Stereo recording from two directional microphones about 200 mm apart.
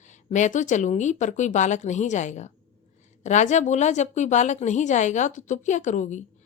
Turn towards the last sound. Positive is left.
turn(degrees=35)  # may be behind; listen again after turning